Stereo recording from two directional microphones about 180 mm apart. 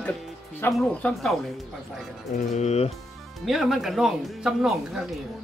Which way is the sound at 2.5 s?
40° left (ahead or behind).